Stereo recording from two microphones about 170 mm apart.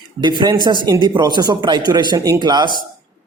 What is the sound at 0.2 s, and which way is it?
Speech, 25° right (ahead or behind).